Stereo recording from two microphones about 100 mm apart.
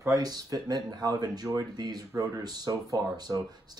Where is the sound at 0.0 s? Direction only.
35° right (ahead or behind).